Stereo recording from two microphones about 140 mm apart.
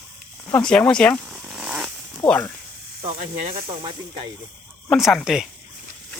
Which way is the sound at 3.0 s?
45° right (ahead or behind).